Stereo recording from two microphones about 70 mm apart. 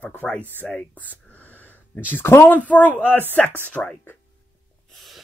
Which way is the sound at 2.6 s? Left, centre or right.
Left.